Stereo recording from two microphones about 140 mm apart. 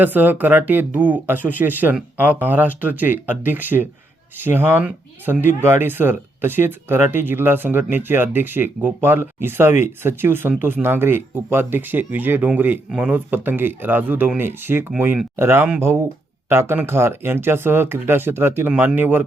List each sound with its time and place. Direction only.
0.0 s speech: 15° right (ahead or behind)